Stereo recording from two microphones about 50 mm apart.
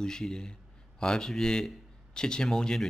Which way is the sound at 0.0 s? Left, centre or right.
Centre.